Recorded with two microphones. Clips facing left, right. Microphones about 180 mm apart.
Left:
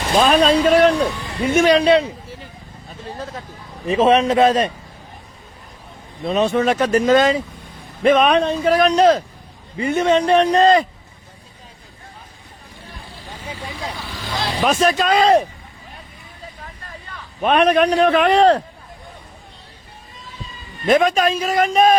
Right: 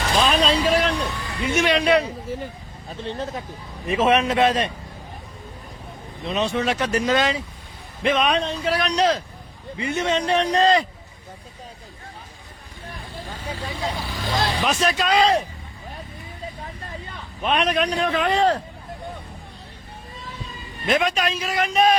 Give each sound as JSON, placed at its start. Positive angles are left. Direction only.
{"t": 0.1, "sound": "speech", "side_deg": 50}
{"t": 1.8, "sound": "a man's voice", "side_deg": 30}
{"t": 2.3, "sound": "speech", "side_deg": -50}
{"t": 3.0, "sound": "speech", "side_deg": -25}
{"t": 3.8, "sound": "a man's voice", "side_deg": 35}
{"t": 6.2, "sound": "speech", "side_deg": 50}
{"t": 14.6, "sound": "speech", "side_deg": 50}
{"t": 17.4, "sound": "a man's voice", "side_deg": 55}
{"t": 20.8, "sound": "speech", "side_deg": 50}